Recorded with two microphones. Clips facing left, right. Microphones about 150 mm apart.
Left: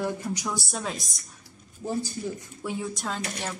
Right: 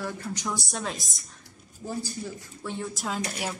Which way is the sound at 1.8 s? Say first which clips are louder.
Left 4 dB; 20° left (ahead or behind).